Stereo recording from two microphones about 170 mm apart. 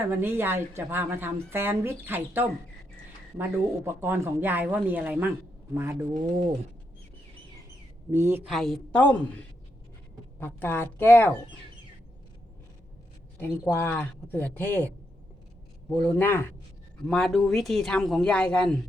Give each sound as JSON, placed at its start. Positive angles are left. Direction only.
{"t": 0.1, "sound": "a woman's voice", "side_deg": -15}
{"t": 8.1, "sound": "a woman's voice", "side_deg": -15}
{"t": 8.4, "sound": "speech", "side_deg": 0}
{"t": 10.4, "sound": "speech", "side_deg": 15}
{"t": 13.4, "sound": "speech", "side_deg": 10}
{"t": 16.0, "sound": "speech", "side_deg": 10}